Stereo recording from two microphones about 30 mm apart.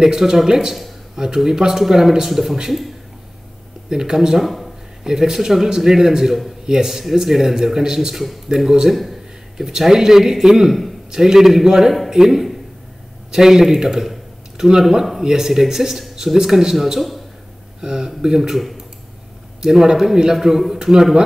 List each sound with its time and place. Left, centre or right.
0.2 s speech: centre
0.5 s a man's voice: right
3.9 s a man's voice: right
4.4 s a sound: centre
5.0 s a man's voice: centre
8.9 s a sound: centre
9.7 s speech: centre
15.2 s speech: centre
16.7 s a man's voice: centre
17.7 s a sound: right
19.6 s speech: centre